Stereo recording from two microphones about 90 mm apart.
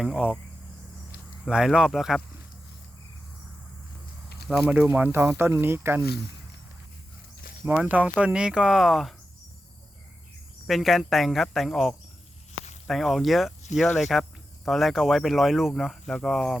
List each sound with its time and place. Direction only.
0.0 s speech: 10° right (ahead or behind)
1.5 s speech: 5° right (ahead or behind)
4.4 s speech: 5° right (ahead or behind)
4.7 s speech: 20° right (ahead or behind)
7.6 s speech: 15° right (ahead or behind)
10.7 s speech: centre (ahead or behind)